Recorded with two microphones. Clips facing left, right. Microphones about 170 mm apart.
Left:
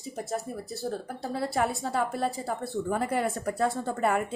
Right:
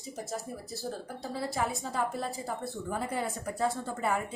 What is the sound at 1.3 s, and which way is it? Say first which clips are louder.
A woman's voice: left 4 dB; 65° left (ahead or behind).